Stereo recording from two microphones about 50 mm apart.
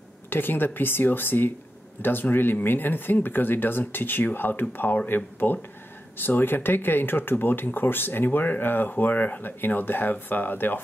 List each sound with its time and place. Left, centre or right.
0.3 s a woman's voice: left